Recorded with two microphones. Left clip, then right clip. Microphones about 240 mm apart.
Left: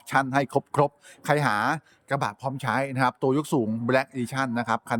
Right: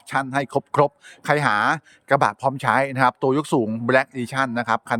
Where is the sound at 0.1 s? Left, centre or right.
Centre.